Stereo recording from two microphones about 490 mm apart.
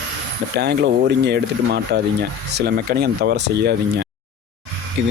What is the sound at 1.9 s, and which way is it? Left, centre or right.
Speech, centre.